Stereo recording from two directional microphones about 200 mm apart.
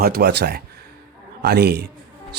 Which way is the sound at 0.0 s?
50° right (ahead or behind).